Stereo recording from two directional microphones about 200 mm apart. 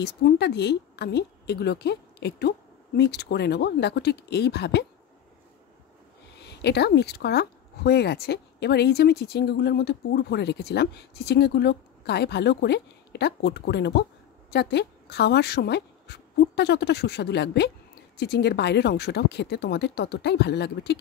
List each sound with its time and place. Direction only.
0.0 s speech: 55° left (ahead or behind)
6.4 s speech: 55° left (ahead or behind)